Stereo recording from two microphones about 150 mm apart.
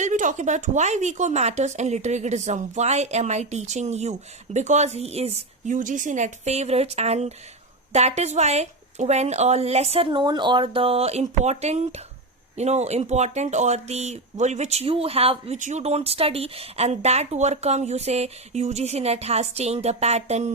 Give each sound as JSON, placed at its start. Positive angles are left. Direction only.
{"t": 0.0, "sound": "speech", "side_deg": -55}
{"t": 15.5, "sound": "speech", "side_deg": -55}